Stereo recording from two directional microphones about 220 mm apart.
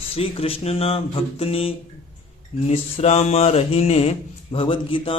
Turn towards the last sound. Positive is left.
turn(degrees=25)  # may be behind; listen again after turning